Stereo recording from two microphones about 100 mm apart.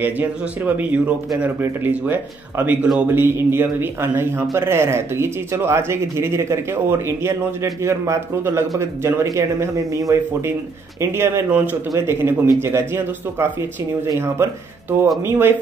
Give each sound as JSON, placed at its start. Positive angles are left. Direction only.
{"t": 0.0, "sound": "speech", "side_deg": -15}